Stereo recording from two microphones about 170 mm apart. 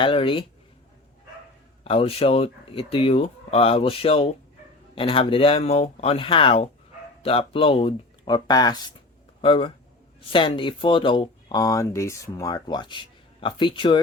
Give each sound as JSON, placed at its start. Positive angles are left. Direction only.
{"t": 0.0, "sound": "speech", "side_deg": 30}
{"t": 1.8, "sound": "speech", "side_deg": 35}